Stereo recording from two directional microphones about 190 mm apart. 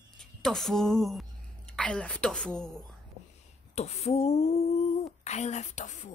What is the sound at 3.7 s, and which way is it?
A woman's voice, 35° left (ahead or behind).